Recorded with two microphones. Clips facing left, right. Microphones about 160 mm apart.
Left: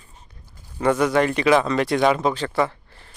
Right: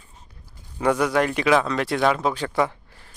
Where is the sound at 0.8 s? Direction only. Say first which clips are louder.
Left 2 dB; 10° right (ahead or behind).